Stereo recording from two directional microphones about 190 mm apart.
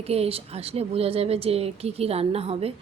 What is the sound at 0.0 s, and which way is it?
Speech, 30° right (ahead or behind).